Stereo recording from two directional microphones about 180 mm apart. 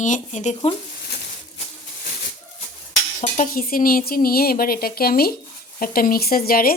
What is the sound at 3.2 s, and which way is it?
Speech, 40° left (ahead or behind).